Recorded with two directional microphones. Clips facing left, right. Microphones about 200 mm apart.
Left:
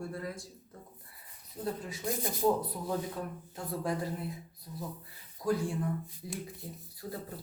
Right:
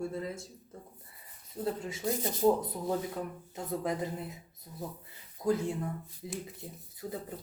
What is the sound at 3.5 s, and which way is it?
Speech, 20° right (ahead or behind).